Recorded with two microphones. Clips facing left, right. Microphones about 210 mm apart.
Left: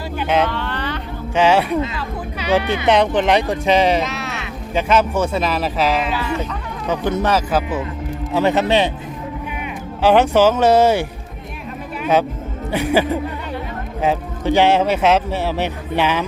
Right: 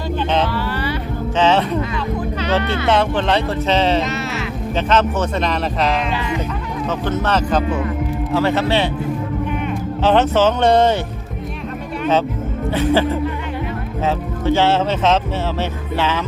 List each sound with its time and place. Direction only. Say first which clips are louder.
0.2 s vehicle: left 2 dB; 10° left (ahead or behind)
0.4 s vehicle: right 2 dB; 10° right (ahead or behind)
1.4 s music: left 1 dB; 10° left (ahead or behind)
2.4 s speech: left 3 dB; 10° left (ahead or behind)
4.0 s speech: right 2 dB; centre (ahead or behind)
4.7 s speech: left 1 dB; 10° left (ahead or behind)
6.1 s speech: even; 20° right (ahead or behind)
6.8 s speech: left 2 dB; 15° left (ahead or behind)
8.3 s speech: left 2 dB; 15° left (ahead or behind)
10.0 s speech: left 2 dB; 10° left (ahead or behind)
12.7 s speech: even; 15° left (ahead or behind)